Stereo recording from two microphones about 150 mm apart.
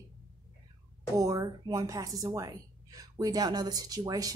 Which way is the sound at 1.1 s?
25° right (ahead or behind).